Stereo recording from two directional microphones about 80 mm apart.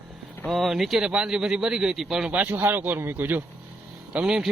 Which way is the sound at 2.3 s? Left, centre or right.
Centre.